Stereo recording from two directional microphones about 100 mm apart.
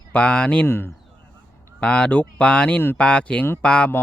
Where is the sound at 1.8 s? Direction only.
10° left (ahead or behind).